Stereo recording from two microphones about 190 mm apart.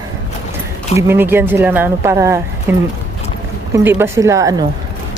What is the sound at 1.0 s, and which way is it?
Speech, 10° right (ahead or behind).